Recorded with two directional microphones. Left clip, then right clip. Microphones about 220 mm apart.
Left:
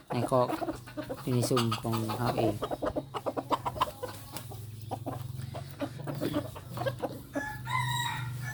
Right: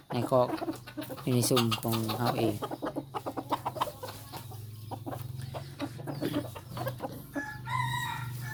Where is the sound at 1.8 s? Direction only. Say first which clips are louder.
Right 1 dB; 10° right (ahead or behind).